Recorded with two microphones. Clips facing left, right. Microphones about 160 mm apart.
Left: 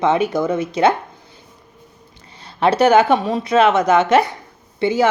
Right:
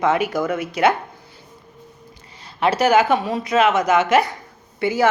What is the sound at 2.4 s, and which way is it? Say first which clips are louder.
A woman's voice: left 4 dB; 30° left (ahead or behind).